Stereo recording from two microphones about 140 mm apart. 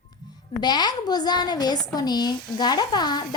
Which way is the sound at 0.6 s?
30° left (ahead or behind).